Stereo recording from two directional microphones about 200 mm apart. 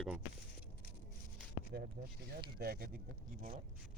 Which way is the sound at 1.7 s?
50° right (ahead or behind).